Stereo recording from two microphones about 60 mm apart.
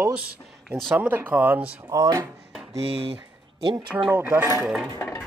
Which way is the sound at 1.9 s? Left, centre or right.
Right.